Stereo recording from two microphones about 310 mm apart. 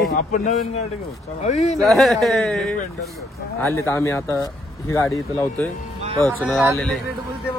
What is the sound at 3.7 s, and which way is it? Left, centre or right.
Speech, centre.